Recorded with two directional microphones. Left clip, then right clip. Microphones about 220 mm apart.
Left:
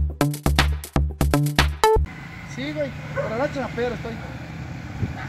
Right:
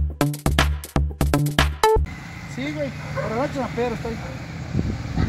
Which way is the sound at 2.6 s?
50° right (ahead or behind).